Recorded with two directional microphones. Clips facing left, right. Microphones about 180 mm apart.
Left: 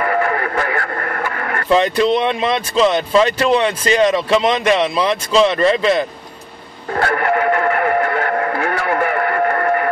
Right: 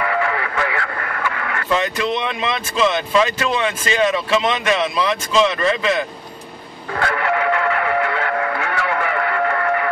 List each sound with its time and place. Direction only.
0.0 s speech: 45° left (ahead or behind)
7.0 s music: 40° left (ahead or behind)